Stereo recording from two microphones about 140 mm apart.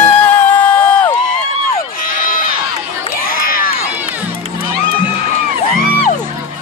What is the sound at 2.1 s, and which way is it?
Run, 85° left.